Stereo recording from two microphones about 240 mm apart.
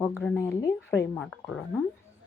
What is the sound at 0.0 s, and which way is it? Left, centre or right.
Speech, centre.